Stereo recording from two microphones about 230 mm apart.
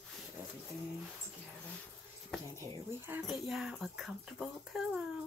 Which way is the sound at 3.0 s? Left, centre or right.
Centre.